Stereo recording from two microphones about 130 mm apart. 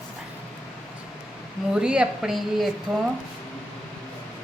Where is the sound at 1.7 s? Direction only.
5° right (ahead or behind).